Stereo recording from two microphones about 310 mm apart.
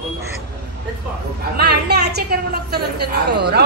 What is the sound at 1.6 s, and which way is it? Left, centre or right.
A woman's voice, right.